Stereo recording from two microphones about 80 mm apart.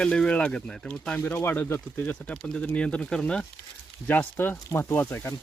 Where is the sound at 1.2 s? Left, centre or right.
Left.